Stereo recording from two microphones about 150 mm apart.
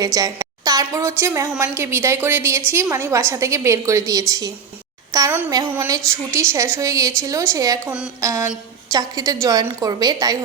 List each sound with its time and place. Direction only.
0.0 s a woman's voice: 25° right (ahead or behind)
7.9 s a sound: 10° right (ahead or behind)
8.2 s a woman's voice: 20° right (ahead or behind)